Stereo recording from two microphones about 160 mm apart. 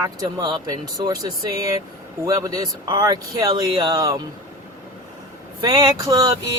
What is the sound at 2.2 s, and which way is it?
Speech, 20° right (ahead or behind).